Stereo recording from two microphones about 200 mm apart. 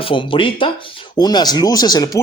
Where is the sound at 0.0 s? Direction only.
25° left (ahead or behind).